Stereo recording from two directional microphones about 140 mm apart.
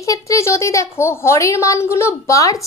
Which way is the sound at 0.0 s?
25° left (ahead or behind).